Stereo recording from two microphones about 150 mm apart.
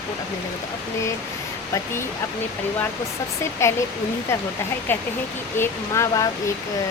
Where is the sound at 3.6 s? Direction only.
20° left (ahead or behind).